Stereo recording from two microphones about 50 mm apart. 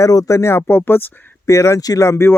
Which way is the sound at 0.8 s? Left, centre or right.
Left.